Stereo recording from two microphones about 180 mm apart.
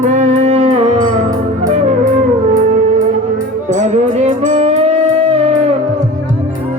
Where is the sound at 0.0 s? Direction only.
40° right (ahead or behind).